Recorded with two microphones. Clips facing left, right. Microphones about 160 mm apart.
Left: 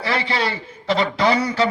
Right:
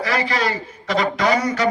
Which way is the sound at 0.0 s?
30° left (ahead or behind).